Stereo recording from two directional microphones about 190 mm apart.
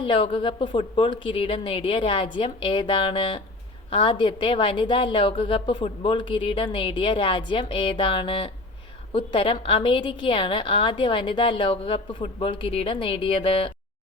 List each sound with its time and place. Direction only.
0.0 s a woman's voice: 25° left (ahead or behind)